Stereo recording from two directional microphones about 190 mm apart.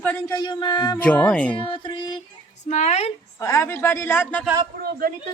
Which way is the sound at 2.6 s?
35° left (ahead or behind).